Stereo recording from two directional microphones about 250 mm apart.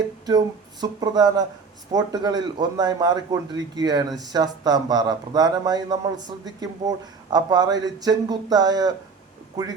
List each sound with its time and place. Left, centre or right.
0.3 s speech: centre